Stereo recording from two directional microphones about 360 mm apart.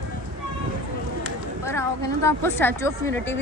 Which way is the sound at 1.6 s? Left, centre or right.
Centre.